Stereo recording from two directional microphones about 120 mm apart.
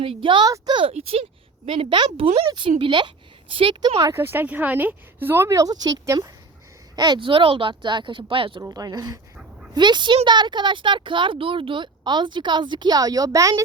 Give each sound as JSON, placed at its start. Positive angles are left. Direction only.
{"t": 0.0, "sound": "speech", "side_deg": -50}
{"t": 4.0, "sound": "speech", "side_deg": -20}
{"t": 8.6, "sound": "speech", "side_deg": -30}